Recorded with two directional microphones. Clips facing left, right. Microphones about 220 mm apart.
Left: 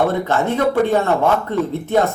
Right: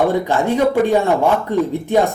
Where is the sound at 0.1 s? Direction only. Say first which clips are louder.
Right 2 dB; 15° right (ahead or behind).